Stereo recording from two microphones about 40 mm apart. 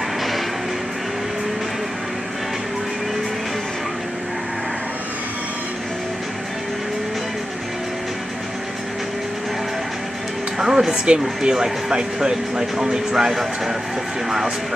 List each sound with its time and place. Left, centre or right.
10.6 s speech: centre
13.1 s speech: centre